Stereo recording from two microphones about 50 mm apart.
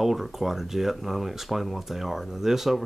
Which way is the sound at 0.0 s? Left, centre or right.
Centre.